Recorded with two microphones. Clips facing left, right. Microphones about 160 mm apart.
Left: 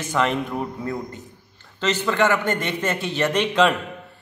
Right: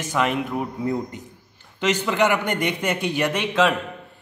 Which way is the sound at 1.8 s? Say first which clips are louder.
Even; 15° right (ahead or behind).